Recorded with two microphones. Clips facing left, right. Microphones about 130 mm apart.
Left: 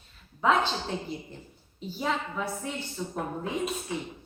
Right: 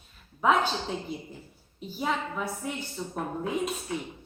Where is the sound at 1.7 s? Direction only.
5° right (ahead or behind).